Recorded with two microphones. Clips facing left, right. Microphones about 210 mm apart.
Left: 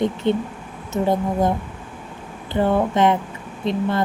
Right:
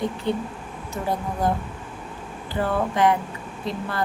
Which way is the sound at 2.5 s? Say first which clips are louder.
Left 5 dB; 20° left (ahead or behind).